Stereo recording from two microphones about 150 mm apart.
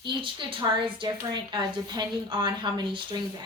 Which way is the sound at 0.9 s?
30° right (ahead or behind).